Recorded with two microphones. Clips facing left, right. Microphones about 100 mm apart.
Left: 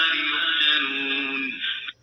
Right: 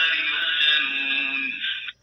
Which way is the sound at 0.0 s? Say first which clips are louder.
Left 1 dB; 40° left (ahead or behind).